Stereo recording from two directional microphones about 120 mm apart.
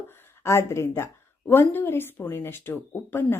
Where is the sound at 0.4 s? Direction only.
25° left (ahead or behind).